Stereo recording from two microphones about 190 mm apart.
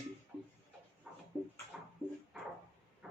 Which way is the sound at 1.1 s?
5° right (ahead or behind).